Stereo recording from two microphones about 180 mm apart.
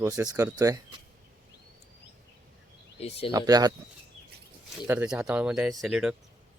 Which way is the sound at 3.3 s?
20° right (ahead or behind).